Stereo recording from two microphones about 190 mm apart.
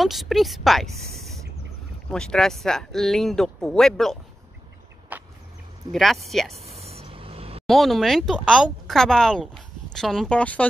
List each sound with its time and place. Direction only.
0.0 s speech: centre (ahead or behind)
2.0 s speech: 5° left (ahead or behind)
5.1 s vehicle: 10° right (ahead or behind)
5.9 s speech: centre (ahead or behind)
6.5 s a sound: 35° right (ahead or behind)
7.6 s speech: centre (ahead or behind)